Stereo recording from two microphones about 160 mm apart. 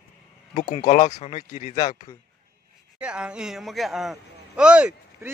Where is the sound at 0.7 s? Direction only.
45° left (ahead or behind).